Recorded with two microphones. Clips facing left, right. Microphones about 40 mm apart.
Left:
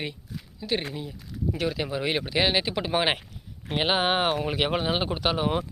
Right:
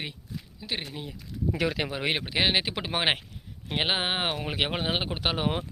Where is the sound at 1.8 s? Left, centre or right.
Right.